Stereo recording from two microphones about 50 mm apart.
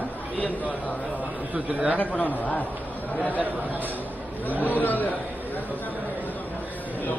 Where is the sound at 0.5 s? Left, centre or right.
Left.